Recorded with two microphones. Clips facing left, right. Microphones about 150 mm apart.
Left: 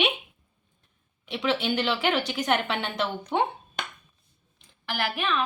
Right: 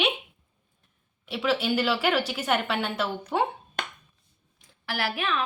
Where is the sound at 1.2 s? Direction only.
5° right (ahead or behind).